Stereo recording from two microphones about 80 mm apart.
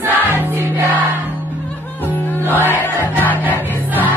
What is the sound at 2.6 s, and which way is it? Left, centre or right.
Music, left.